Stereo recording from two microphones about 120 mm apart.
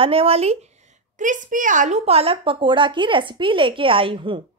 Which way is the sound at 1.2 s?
90° right.